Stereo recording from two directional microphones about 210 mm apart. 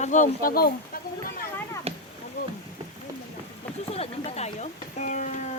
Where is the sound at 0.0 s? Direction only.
35° left (ahead or behind).